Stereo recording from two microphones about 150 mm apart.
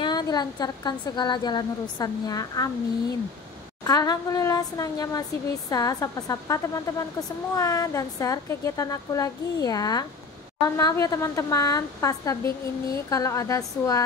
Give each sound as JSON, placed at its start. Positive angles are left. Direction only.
{"t": 0.0, "sound": "speech", "side_deg": 25}
{"t": 3.8, "sound": "speech", "side_deg": 25}